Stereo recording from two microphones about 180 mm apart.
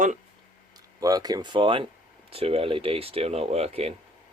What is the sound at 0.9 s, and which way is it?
Speech, 20° right (ahead or behind).